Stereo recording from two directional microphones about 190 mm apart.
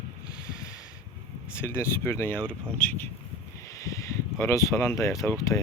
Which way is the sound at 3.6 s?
15° left (ahead or behind).